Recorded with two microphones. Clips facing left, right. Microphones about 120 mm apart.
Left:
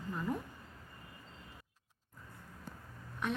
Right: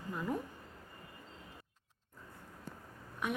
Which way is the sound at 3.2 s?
10° right (ahead or behind).